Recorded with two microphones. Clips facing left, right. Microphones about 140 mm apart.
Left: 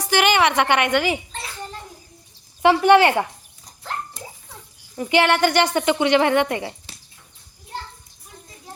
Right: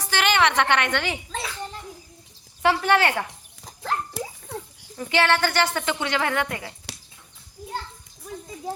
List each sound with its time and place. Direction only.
0.0 s a woman's voice: 10° left (ahead or behind)
2.6 s speech: 15° left (ahead or behind)
3.8 s dog: 70° right (ahead or behind)
5.1 s a woman's voice: 15° left (ahead or behind)